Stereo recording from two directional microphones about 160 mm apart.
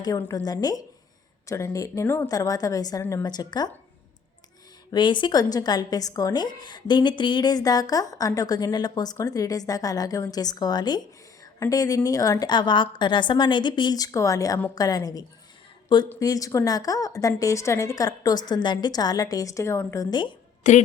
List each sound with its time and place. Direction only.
0.0 s a woman's voice: 20° left (ahead or behind)
4.9 s a woman's voice: 30° left (ahead or behind)
20.7 s a woman's voice: 50° left (ahead or behind)